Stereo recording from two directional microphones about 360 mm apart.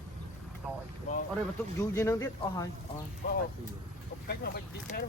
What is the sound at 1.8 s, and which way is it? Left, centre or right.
Speech, centre.